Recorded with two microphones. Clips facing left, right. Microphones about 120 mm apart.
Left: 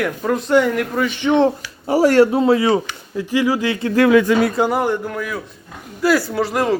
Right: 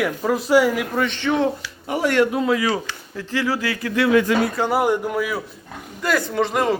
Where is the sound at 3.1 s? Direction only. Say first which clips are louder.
Left 5 dB; 15° left (ahead or behind).